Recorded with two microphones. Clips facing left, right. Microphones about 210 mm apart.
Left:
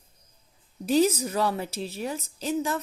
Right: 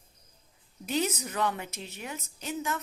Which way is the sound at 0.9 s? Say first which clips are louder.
Left 8 dB; 30° left (ahead or behind).